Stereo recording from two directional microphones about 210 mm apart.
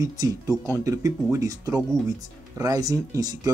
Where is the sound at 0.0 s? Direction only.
15° right (ahead or behind).